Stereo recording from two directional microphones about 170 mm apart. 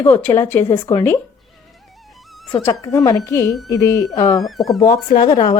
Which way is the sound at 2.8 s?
20° left (ahead or behind).